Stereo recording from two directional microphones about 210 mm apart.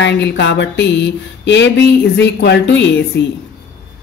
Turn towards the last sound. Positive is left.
turn(degrees=60)  # may be behind; listen again after turning